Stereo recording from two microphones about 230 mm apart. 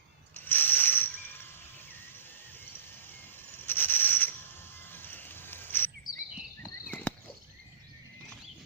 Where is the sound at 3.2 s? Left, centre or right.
Centre.